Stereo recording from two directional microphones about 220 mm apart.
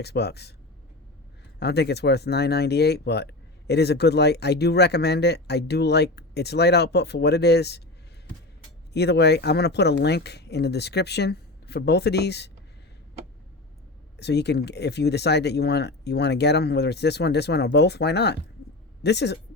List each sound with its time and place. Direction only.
0.0 s speech: 50° left (ahead or behind)
1.5 s speech: 50° left (ahead or behind)
8.9 s speech: 50° left (ahead or behind)
14.2 s speech: 50° left (ahead or behind)